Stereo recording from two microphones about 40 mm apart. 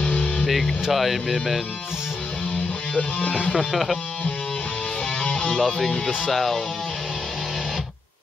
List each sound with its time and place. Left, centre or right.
0.1 s music: left
0.5 s speech: centre
2.9 s music: left
3.5 s speech: centre
5.2 s music: left
6.3 s speech: centre